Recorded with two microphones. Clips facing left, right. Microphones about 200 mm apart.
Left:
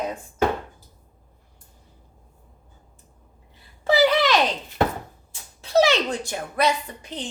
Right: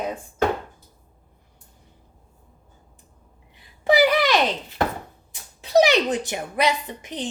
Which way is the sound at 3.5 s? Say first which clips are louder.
Right 2 dB; 15° right (ahead or behind).